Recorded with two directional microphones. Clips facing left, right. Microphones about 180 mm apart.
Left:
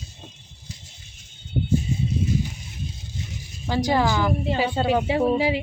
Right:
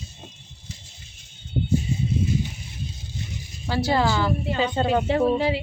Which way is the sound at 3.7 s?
15° left (ahead or behind).